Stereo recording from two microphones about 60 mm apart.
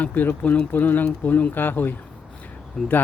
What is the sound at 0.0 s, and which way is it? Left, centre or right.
Speech, left.